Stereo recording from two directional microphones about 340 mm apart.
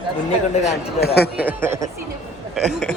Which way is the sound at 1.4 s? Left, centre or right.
Centre.